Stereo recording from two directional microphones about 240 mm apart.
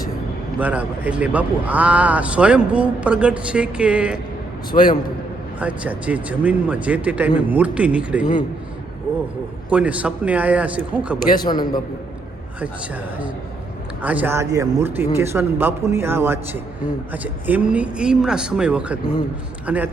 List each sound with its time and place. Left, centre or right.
0.6 s a man's voice: centre
4.7 s a man's voice: left
5.5 s a man's voice: centre
9.6 s a man's voice: centre
11.3 s a man's voice: centre
14.0 s a man's voice: centre